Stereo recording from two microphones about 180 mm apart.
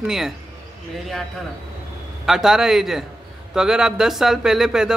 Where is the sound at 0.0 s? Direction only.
Centre (ahead or behind).